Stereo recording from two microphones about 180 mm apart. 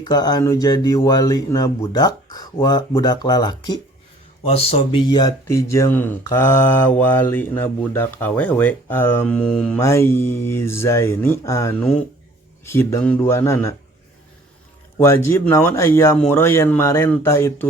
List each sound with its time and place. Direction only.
0.0 s speech: 20° left (ahead or behind)
14.9 s speech: 15° left (ahead or behind)